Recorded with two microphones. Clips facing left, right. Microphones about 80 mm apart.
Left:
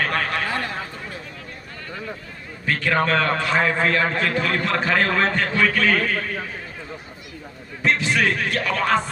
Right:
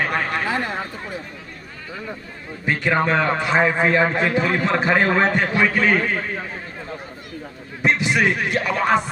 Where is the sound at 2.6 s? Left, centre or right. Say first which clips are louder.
Right 1 dB; centre.